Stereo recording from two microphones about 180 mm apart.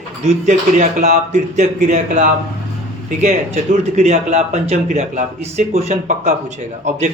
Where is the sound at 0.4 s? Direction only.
40° right (ahead or behind).